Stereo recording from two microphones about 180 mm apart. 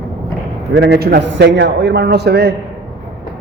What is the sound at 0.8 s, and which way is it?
A man's voice, 65° right (ahead or behind).